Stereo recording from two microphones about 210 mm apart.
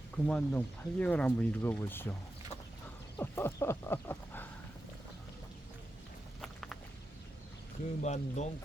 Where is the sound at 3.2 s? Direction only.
10° left (ahead or behind).